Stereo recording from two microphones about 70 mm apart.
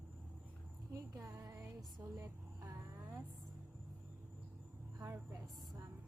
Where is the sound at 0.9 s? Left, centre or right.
Right.